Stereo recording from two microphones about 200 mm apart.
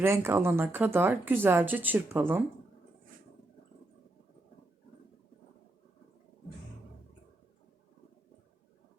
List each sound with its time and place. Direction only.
0.0 s speech: 10° right (ahead or behind)